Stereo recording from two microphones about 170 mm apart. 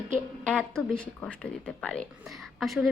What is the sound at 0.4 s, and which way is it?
A woman's voice, 5° left (ahead or behind).